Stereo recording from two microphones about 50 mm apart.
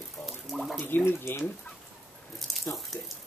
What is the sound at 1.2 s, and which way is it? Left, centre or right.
Speech, left.